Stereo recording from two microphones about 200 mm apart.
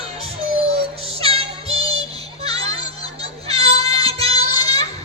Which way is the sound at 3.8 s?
30° right (ahead or behind).